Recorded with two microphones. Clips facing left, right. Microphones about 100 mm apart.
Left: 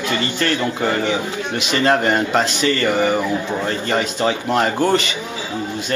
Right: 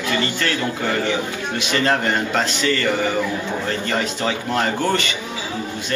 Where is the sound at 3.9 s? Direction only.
20° left (ahead or behind).